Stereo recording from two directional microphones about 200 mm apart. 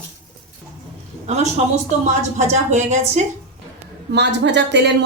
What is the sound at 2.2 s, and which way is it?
A woman's voice, 35° right (ahead or behind).